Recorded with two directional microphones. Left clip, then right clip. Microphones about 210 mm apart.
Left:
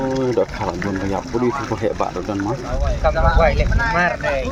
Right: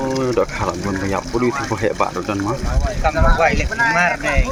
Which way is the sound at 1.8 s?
5° left (ahead or behind).